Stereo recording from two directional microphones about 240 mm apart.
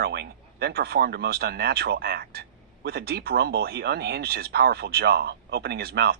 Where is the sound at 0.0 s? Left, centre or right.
Right.